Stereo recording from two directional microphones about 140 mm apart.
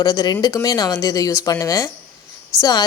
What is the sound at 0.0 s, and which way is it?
Speech, 25° left (ahead or behind).